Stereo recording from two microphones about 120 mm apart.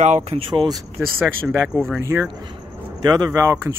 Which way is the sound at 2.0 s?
25° right (ahead or behind).